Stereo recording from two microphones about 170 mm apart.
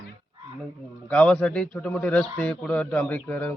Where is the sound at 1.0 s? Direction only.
5° left (ahead or behind).